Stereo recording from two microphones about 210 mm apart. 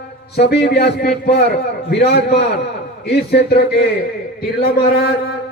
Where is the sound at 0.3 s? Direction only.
50° left (ahead or behind).